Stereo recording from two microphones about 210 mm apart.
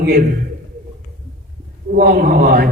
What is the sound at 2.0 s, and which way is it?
Speech, 45° right (ahead or behind).